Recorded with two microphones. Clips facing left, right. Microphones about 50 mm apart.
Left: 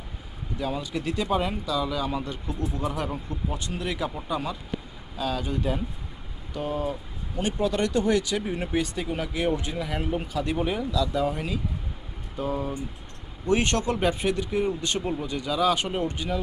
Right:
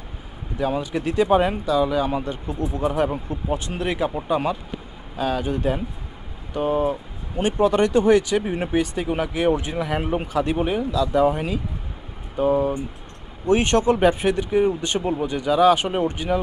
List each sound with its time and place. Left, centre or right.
0.6 s speech: right
10.8 s speech: right
15.7 s speech: right